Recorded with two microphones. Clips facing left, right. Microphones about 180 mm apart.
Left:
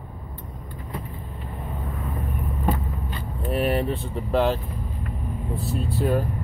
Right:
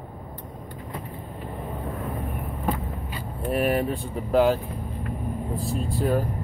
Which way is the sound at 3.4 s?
5° right (ahead or behind).